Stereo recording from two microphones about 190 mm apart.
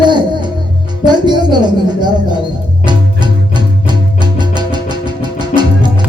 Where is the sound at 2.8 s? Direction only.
25° right (ahead or behind).